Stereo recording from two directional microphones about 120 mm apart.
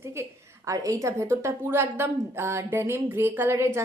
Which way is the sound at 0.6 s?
25° right (ahead or behind).